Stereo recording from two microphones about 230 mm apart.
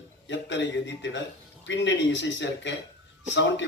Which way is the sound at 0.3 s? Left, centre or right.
Left.